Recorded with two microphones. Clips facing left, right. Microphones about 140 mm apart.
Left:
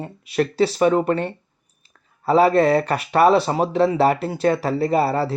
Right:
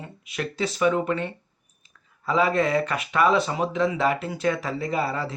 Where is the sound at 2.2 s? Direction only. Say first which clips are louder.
Left 7 dB; 35° left (ahead or behind).